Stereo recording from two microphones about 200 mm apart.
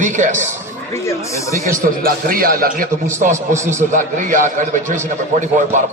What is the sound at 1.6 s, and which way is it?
A man's voice, 45° right (ahead or behind).